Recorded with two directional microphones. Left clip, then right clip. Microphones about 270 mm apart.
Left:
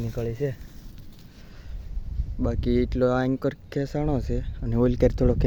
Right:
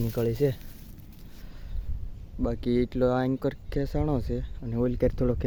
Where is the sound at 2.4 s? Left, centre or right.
Centre.